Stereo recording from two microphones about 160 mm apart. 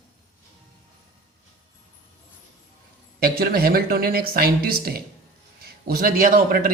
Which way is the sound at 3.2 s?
70° right (ahead or behind).